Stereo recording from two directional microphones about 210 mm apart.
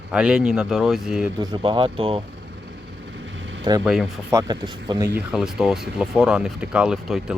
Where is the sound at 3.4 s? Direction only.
65° right (ahead or behind).